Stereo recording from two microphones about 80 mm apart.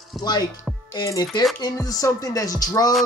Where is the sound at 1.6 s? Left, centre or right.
Left.